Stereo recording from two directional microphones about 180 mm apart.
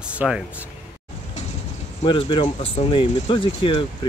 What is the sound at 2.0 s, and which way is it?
Speech, 30° left (ahead or behind).